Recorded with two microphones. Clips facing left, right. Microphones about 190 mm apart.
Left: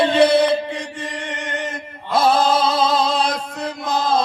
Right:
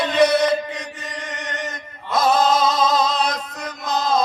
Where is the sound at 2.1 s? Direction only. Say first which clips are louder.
Left 1 dB; 30° left (ahead or behind).